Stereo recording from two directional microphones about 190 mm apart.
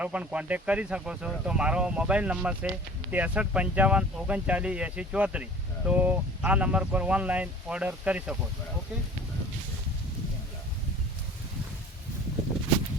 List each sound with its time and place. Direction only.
0.0 s speech: 5° right (ahead or behind)